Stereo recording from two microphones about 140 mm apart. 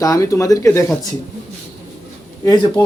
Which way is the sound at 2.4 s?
25° left (ahead or behind).